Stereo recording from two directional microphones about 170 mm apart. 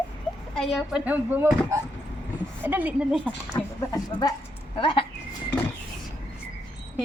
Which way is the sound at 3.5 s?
20° left (ahead or behind).